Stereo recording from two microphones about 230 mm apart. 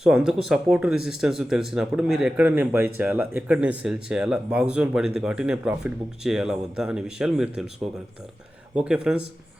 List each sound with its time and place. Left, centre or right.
0.0 s speech: centre
8.7 s speech: centre